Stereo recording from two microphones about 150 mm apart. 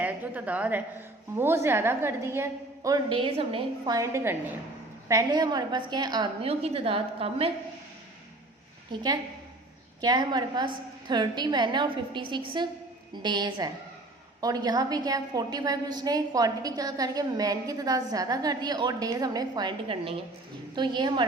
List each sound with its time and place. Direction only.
0.0 s a woman's voice: 10° right (ahead or behind)
3.1 s a woman's voice: 35° right (ahead or behind)
3.8 s a woman's voice: 20° right (ahead or behind)
6.4 s a woman's voice: 40° right (ahead or behind)
10.0 s a woman's voice: 25° right (ahead or behind)